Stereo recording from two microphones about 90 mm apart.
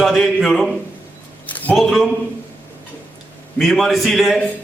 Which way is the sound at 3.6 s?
Centre (ahead or behind).